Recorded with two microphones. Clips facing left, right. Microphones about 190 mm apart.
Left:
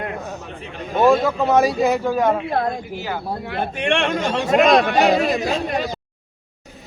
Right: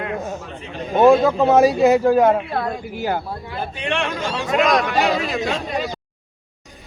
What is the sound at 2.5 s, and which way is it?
Speech, 40° left (ahead or behind).